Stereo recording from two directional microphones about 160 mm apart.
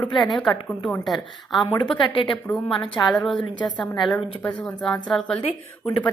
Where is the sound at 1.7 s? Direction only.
30° left (ahead or behind).